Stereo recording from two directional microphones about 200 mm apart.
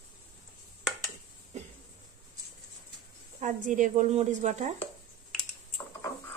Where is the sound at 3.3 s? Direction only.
40° right (ahead or behind).